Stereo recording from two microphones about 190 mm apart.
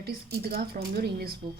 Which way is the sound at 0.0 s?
55° right (ahead or behind).